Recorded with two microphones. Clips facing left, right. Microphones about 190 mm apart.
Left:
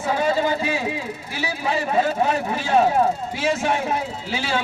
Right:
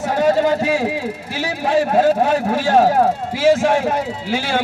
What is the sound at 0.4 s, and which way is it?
Speech, 70° right (ahead or behind).